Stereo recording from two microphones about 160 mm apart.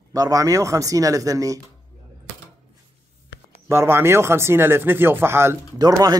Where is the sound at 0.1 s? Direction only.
20° right (ahead or behind).